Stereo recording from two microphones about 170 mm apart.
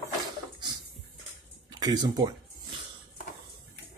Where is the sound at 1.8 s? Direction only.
25° right (ahead or behind).